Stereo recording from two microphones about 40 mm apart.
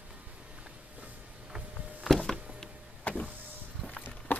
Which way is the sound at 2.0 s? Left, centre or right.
Centre.